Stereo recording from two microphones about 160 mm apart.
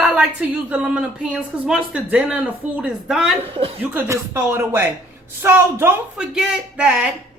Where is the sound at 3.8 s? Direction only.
15° right (ahead or behind).